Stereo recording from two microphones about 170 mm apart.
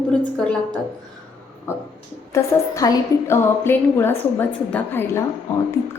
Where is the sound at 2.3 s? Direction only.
20° left (ahead or behind).